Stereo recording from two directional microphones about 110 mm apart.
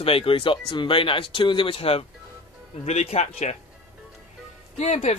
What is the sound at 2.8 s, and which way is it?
Speech, 85° left.